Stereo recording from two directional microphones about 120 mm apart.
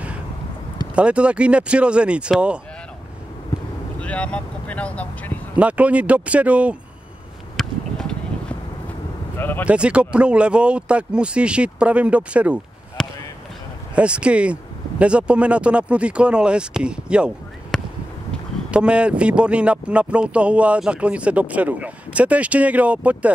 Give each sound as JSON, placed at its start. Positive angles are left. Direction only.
{"t": 0.9, "sound": "speech", "side_deg": -10}
{"t": 4.0, "sound": "speech", "side_deg": 10}
{"t": 5.6, "sound": "speech", "side_deg": -10}
{"t": 7.5, "sound": "a sound", "side_deg": 5}
{"t": 9.4, "sound": "speech", "side_deg": 15}
{"t": 9.7, "sound": "speech", "side_deg": -10}
{"t": 13.0, "sound": "basketball bounce", "side_deg": 5}
{"t": 13.9, "sound": "speech", "side_deg": -10}
{"t": 17.7, "sound": "a sound", "side_deg": 5}
{"t": 18.7, "sound": "speech", "side_deg": -10}